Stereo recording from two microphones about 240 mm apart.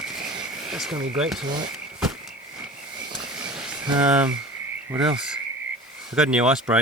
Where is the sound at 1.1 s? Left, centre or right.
Centre.